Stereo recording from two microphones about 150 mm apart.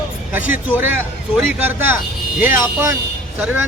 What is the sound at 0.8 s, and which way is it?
Speech, 10° right (ahead or behind).